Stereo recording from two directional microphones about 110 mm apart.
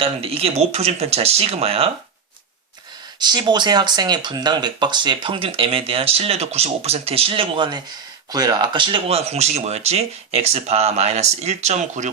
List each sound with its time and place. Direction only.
0.0 s speech: 60° right (ahead or behind)
3.2 s speech: 40° right (ahead or behind)
8.3 s speech: 35° right (ahead or behind)
9.0 s speech: 75° right (ahead or behind); by 12.1 s 90° right